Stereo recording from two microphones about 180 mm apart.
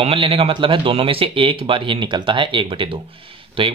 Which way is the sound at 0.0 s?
30° right (ahead or behind).